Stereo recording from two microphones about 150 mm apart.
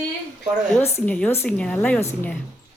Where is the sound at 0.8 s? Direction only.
15° left (ahead or behind).